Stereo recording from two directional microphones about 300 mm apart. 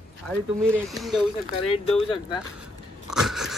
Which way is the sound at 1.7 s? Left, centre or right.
Centre.